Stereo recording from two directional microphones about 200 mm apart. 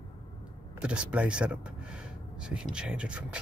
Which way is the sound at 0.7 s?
5° right (ahead or behind).